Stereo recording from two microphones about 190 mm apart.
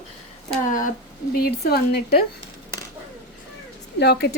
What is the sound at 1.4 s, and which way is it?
Speech, 55° left (ahead or behind).